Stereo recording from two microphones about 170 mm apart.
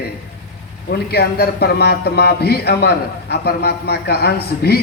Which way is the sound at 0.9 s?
65° left (ahead or behind).